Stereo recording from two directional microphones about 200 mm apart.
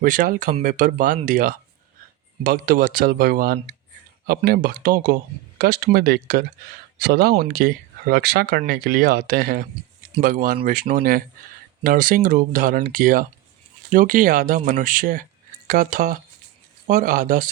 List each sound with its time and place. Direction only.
0.0 s speech: 45° right (ahead or behind)